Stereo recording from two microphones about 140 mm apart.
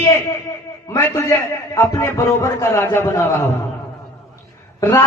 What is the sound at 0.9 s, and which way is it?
A man's voice, 20° left (ahead or behind).